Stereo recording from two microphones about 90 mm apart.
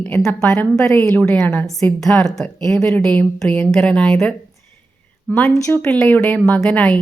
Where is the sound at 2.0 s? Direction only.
5° left (ahead or behind).